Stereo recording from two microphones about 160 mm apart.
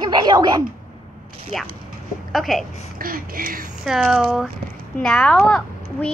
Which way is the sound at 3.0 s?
65° right (ahead or behind).